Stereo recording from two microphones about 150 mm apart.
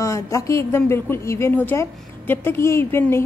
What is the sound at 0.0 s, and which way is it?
A woman's voice, 20° left (ahead or behind).